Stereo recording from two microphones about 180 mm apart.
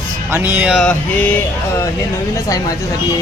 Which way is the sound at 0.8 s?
5° left (ahead or behind).